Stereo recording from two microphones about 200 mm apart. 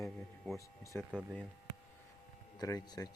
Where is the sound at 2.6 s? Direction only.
20° left (ahead or behind).